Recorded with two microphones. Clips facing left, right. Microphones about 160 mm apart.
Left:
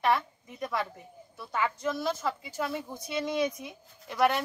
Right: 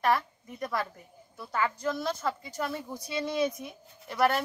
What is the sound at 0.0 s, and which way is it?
A woman's voice, centre (ahead or behind).